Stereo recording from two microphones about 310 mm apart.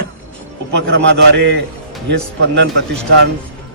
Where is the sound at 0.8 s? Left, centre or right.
Right.